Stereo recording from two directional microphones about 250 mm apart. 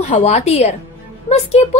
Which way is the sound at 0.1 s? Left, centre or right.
Left.